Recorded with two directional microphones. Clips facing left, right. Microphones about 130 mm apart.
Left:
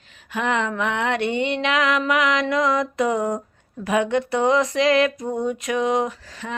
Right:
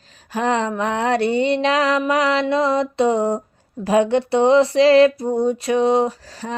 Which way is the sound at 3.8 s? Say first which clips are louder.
Right 4 dB; 30° right (ahead or behind).